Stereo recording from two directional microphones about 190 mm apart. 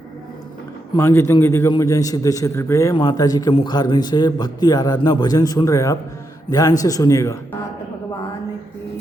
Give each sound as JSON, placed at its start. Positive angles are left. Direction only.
{"t": 0.9, "sound": "a man's voice", "side_deg": 10}